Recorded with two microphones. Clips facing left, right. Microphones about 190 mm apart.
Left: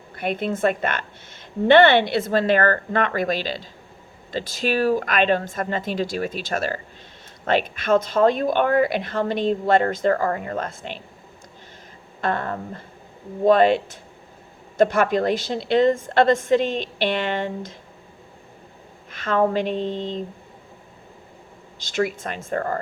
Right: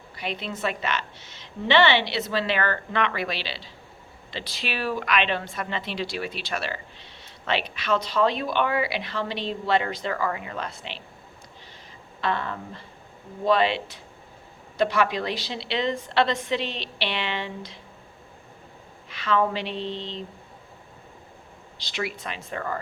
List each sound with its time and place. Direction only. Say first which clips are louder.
0.2 s a woman's voice: left 8 dB; 50° left (ahead or behind)
12.2 s a woman's voice: left 3 dB; 45° left (ahead or behind)
19.1 s a woman's voice: left 4 dB; 50° left (ahead or behind)
21.8 s a woman's voice: left 8 dB; 45° left (ahead or behind)